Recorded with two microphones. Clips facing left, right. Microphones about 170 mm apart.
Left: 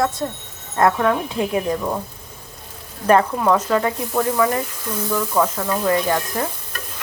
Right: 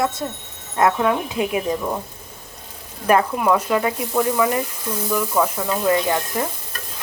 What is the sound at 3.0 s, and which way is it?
Speech, 10° right (ahead or behind).